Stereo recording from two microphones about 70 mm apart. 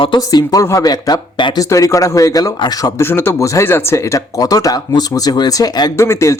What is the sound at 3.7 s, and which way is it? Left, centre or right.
Speech, left.